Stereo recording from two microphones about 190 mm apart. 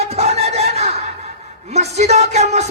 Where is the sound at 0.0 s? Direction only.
35° right (ahead or behind).